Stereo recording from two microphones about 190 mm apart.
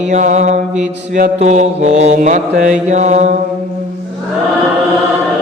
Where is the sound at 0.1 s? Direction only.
40° right (ahead or behind).